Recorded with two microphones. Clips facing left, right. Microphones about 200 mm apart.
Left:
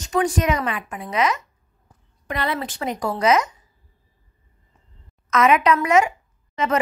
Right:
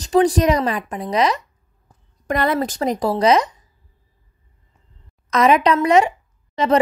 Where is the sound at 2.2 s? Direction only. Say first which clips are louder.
Right 6 dB; 45° right (ahead or behind).